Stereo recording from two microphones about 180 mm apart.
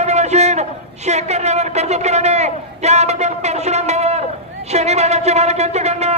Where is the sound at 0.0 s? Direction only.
40° right (ahead or behind).